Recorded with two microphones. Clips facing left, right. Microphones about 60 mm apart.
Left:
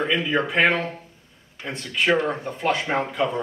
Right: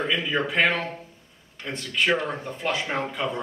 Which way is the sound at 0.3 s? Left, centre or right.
Centre.